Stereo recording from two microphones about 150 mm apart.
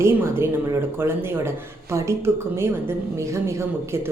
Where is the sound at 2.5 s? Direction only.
15° right (ahead or behind).